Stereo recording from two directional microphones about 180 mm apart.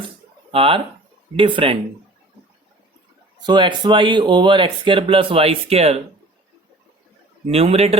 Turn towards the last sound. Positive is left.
turn(degrees=-35)  # may be behind; listen again after turning